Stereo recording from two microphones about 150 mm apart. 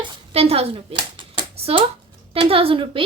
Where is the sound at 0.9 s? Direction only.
35° right (ahead or behind).